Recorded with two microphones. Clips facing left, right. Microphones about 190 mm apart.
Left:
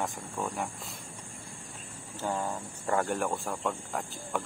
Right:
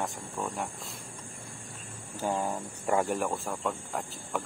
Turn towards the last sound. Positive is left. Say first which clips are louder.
# even
turn(degrees=-5)  # may be behind; listen again after turning